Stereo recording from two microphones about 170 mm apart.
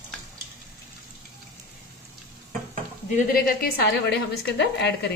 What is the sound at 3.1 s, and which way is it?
A woman's voice, 60° left (ahead or behind).